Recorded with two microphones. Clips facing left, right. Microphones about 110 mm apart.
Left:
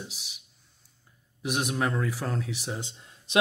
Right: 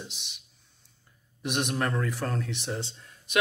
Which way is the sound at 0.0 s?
5° left (ahead or behind).